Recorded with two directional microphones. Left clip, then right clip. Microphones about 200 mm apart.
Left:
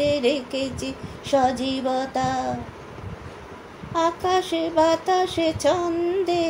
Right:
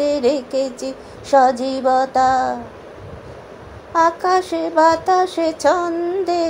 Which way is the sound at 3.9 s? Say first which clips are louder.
Right 6 dB; 10° right (ahead or behind).